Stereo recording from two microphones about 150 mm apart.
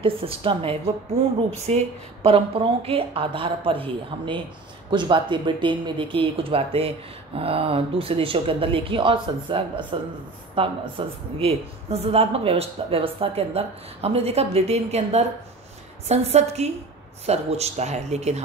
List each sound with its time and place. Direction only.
0.0 s a woman's voice: 35° right (ahead or behind)